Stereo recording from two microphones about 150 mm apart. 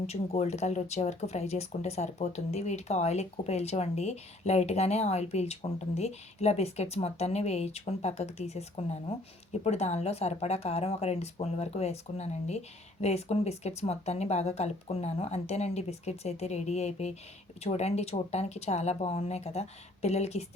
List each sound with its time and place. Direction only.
0.1 s speech: 45° left (ahead or behind)